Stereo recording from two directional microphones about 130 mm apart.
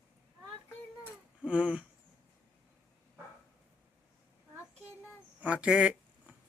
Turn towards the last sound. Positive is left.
turn(degrees=-5)  # may be behind; listen again after turning